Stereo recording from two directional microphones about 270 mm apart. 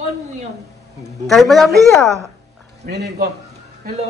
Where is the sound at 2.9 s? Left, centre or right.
Right.